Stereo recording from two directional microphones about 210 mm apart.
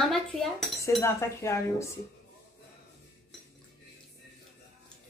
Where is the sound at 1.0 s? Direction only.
15° left (ahead or behind).